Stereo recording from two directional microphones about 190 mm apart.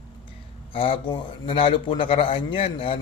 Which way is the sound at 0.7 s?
30° left (ahead or behind).